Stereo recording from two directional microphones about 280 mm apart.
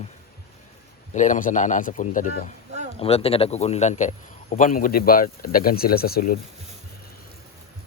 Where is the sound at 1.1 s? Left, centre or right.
Left.